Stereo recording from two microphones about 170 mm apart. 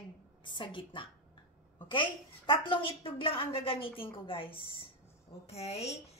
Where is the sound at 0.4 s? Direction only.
30° left (ahead or behind).